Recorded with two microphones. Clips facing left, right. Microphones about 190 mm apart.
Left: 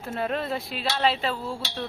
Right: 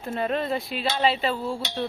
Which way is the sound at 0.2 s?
5° left (ahead or behind).